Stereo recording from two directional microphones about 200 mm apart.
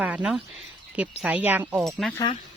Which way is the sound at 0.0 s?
5° right (ahead or behind).